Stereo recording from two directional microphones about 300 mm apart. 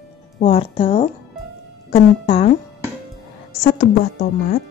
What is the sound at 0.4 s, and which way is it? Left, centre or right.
Speech, centre.